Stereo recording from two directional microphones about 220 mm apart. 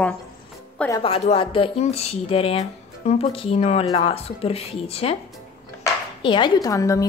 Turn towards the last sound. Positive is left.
turn(degrees=15)  # may be behind; listen again after turning